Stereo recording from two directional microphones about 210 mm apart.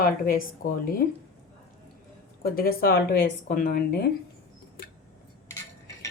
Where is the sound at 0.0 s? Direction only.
45° left (ahead or behind).